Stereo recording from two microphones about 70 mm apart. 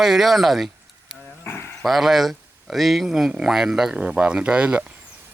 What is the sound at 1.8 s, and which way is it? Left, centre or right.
Speech, centre.